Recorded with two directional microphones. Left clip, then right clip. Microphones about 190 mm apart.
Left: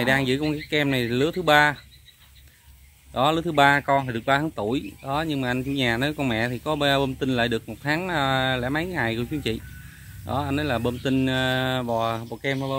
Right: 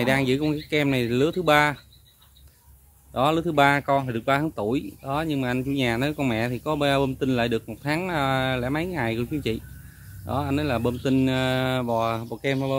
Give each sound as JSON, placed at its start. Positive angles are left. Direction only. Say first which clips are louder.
{"t": 0.0, "sound": "speech", "louder": "even", "side_deg": -5}
{"t": 3.1, "sound": "speech", "louder": "even", "side_deg": -5}